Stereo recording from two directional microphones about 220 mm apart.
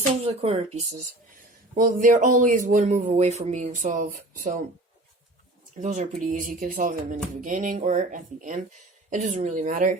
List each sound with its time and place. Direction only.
0.2 s speech: 25° right (ahead or behind)
5.7 s speech: 30° right (ahead or behind)